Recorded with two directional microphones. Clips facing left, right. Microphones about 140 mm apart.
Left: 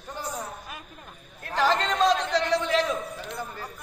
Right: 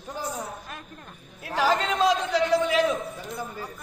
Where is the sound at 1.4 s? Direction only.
5° right (ahead or behind).